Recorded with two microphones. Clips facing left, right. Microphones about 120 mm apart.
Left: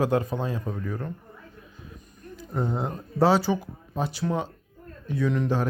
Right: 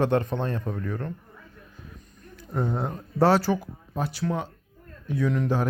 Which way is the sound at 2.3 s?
Centre (ahead or behind).